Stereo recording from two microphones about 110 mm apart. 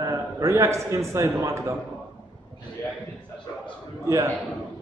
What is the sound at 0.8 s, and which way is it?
Speech, 25° right (ahead or behind).